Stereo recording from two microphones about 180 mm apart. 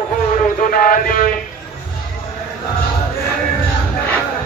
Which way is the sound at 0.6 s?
50° left (ahead or behind).